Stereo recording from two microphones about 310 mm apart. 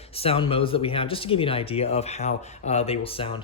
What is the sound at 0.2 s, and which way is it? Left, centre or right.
Speech, centre.